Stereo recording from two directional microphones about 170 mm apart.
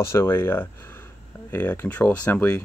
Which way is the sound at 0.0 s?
15° left (ahead or behind).